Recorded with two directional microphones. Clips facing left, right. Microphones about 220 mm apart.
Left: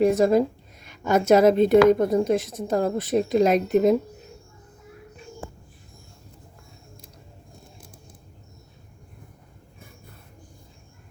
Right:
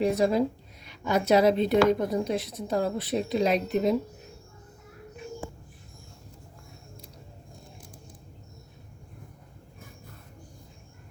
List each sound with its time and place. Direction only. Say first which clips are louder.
0.0 s a woman's voice: left 5 dB; 50° left (ahead or behind)